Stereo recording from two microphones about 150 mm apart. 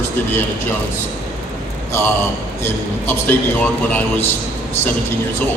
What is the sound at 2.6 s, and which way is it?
A man's voice, 15° left (ahead or behind).